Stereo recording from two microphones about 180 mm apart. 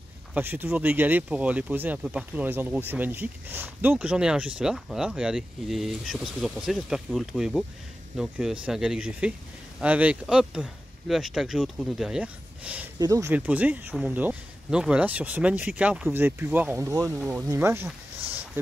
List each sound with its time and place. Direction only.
0.3 s speech: 10° right (ahead or behind)
13.0 s speech: 20° right (ahead or behind)
13.3 s speech: 10° right (ahead or behind)